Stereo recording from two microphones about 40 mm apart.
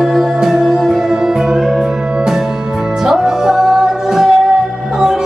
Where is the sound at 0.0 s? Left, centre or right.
Centre.